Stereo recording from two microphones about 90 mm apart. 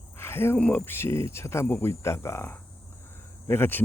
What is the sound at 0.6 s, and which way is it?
Speech, 15° left (ahead or behind).